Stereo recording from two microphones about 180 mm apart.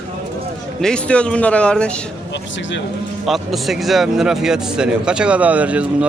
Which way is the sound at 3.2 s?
Centre (ahead or behind).